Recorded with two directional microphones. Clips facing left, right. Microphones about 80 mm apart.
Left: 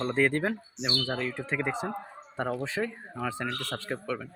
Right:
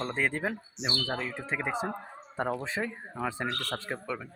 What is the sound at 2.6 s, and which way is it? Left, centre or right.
Speech, right.